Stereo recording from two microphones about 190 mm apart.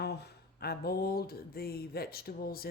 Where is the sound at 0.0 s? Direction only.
60° left (ahead or behind).